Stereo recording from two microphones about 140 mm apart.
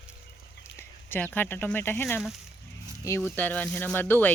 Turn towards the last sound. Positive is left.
turn(degrees=15)  # may be behind; listen again after turning